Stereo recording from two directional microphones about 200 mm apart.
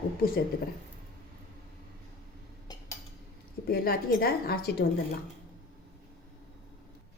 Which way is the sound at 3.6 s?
50° left (ahead or behind).